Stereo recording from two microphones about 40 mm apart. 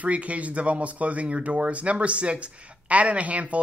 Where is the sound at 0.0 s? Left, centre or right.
Right.